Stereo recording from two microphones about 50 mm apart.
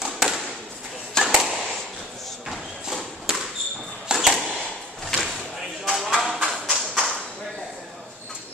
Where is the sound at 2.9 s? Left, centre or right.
Centre.